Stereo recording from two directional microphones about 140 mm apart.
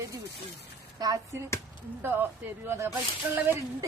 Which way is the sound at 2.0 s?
15° right (ahead or behind).